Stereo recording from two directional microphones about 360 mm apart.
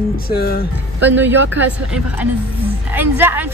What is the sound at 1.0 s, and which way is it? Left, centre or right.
Speech, centre.